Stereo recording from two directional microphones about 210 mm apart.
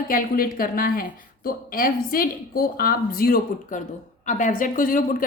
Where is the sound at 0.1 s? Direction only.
40° left (ahead or behind).